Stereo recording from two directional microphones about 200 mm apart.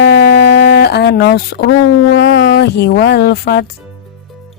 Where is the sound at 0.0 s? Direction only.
60° left (ahead or behind).